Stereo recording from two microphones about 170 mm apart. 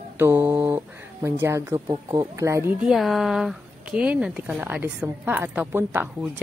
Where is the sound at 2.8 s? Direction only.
Centre (ahead or behind).